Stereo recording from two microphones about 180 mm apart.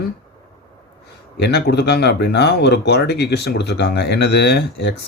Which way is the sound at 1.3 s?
70° left (ahead or behind).